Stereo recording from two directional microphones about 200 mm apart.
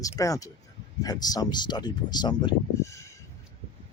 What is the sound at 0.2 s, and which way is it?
Speech, 15° left (ahead or behind).